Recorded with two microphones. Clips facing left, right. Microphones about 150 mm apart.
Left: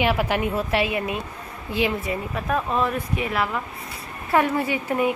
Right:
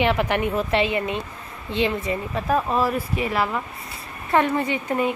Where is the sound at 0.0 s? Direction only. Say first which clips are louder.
Right 1 dB; 10° left (ahead or behind).